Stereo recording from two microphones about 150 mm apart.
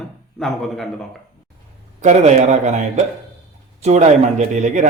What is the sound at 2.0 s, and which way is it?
A man's voice, 50° right (ahead or behind).